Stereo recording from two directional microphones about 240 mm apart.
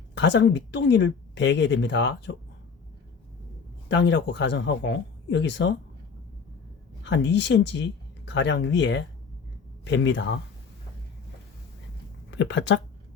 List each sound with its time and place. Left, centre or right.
0.1 s speech: left
3.8 s speech: left
7.0 s speech: left
12.3 s speech: left